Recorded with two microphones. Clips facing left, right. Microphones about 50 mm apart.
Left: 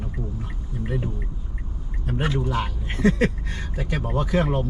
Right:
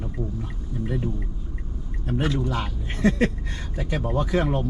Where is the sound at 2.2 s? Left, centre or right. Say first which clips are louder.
Left 1 dB; centre.